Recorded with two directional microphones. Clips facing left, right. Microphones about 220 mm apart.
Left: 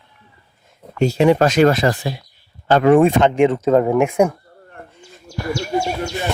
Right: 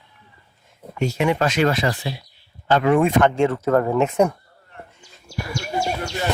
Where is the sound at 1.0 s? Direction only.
30° left (ahead or behind).